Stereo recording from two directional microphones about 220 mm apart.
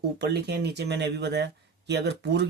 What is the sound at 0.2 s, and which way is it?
Speech, 50° right (ahead or behind).